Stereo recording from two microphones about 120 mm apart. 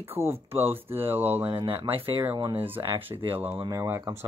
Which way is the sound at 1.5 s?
50° right (ahead or behind).